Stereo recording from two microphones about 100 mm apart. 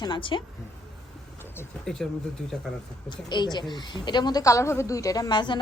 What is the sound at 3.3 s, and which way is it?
A woman's voice, 45° left (ahead or behind).